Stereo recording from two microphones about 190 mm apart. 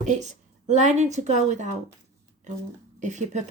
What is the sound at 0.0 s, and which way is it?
A woman's voice, 40° right (ahead or behind).